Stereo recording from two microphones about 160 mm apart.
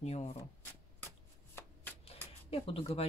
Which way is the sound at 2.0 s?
35° left (ahead or behind).